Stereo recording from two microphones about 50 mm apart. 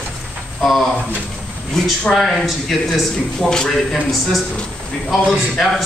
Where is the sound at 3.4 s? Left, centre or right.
Centre.